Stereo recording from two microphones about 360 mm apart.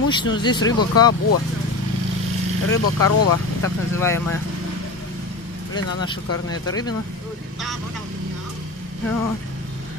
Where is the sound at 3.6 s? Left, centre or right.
Centre.